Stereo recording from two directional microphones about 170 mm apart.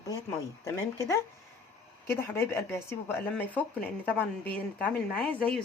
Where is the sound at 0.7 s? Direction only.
20° left (ahead or behind).